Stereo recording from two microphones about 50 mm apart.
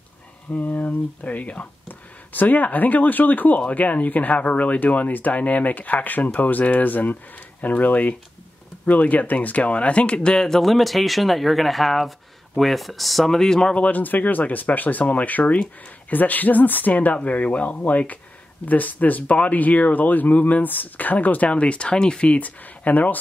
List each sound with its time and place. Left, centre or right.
0.5 s speech: left; by 13.7 s centre
13.7 s speech: left
22.6 s speech: left